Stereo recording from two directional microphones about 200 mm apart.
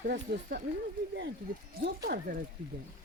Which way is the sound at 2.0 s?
45° right (ahead or behind).